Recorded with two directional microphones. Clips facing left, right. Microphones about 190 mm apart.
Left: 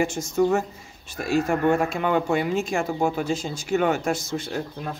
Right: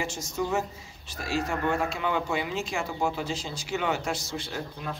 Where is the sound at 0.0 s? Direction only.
55° left (ahead or behind).